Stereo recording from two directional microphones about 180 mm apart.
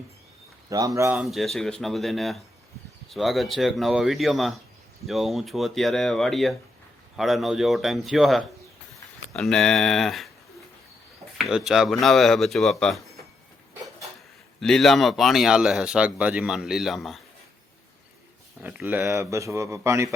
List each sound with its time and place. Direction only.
0.7 s speech: 20° right (ahead or behind)
1.1 s speech: centre (ahead or behind)
11.3 s speech: centre (ahead or behind)
14.6 s speech: centre (ahead or behind)
18.6 s speech: 10° right (ahead or behind)